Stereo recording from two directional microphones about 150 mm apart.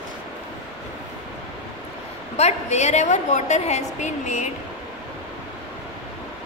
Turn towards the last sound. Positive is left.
turn(degrees=50)  # may be behind; listen again after turning